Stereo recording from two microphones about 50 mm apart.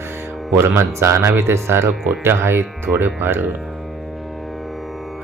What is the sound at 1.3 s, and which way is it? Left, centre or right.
Speech, right.